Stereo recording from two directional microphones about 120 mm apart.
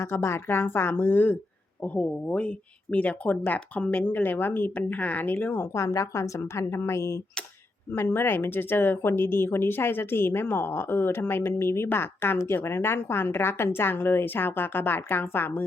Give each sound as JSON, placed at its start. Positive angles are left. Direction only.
{"t": 0.0, "sound": "speech", "side_deg": 20}